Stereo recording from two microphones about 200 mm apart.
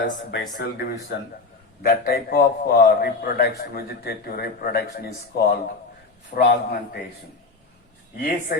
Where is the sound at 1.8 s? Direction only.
50° left (ahead or behind).